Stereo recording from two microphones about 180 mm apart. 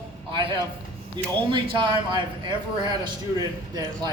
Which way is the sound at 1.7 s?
25° right (ahead or behind).